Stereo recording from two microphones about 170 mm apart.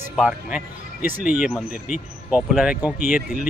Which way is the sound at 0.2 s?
5° right (ahead or behind).